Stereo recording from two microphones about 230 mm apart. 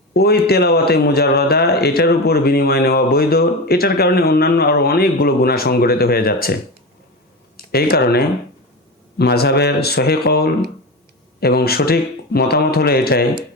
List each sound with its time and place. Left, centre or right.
0.1 s speech: left